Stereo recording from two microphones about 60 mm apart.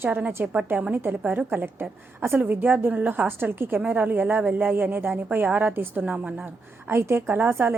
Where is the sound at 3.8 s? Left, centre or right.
Right.